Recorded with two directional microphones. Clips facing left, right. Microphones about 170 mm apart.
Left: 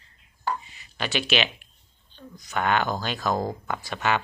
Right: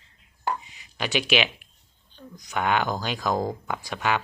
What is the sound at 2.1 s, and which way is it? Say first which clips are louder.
Speech: even; 15° right (ahead or behind).